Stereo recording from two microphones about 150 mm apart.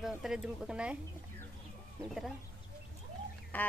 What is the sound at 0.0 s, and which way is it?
Speech, centre (ahead or behind).